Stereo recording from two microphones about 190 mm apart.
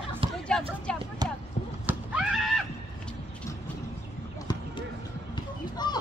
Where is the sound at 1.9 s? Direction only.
5° right (ahead or behind).